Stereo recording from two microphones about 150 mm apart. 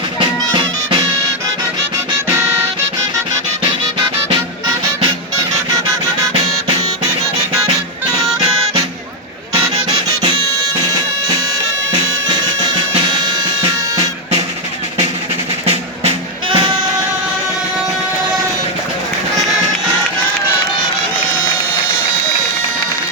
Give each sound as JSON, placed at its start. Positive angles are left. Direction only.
{"t": 0.2, "sound": "music", "side_deg": -35}
{"t": 15.6, "sound": "music", "side_deg": -40}